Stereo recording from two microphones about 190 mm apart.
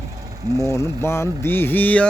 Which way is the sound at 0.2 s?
15° right (ahead or behind).